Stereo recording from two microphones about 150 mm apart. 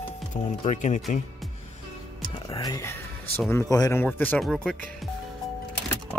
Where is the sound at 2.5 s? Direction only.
25° left (ahead or behind).